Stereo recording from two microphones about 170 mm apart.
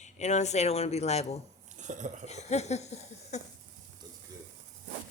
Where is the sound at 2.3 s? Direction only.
40° left (ahead or behind).